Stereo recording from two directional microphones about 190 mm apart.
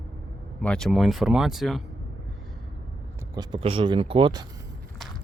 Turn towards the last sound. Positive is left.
turn(degrees=-25)  # may be behind; listen again after turning